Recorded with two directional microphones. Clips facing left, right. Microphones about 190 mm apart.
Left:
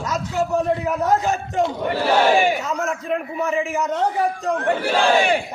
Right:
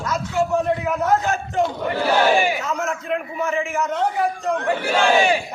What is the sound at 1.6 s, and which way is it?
Speech, centre (ahead or behind).